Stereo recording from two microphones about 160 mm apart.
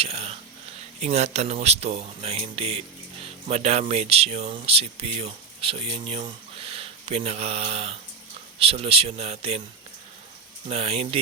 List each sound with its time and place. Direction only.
0.0 s speech: 40° right (ahead or behind)
10.7 s speech: 40° right (ahead or behind)